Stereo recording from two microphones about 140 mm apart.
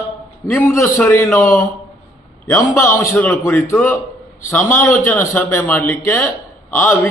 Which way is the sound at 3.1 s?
10° left (ahead or behind).